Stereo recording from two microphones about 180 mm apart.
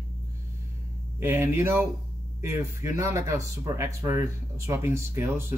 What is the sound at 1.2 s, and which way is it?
Speech, 15° right (ahead or behind).